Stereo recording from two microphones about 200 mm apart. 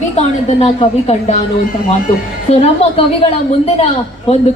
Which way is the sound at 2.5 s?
35° left (ahead or behind).